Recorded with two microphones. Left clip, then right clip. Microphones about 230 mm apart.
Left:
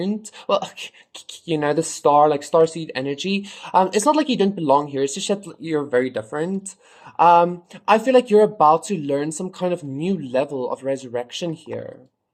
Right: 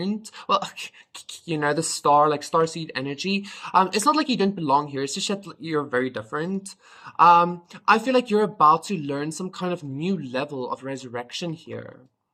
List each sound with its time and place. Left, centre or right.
0.0 s speech: centre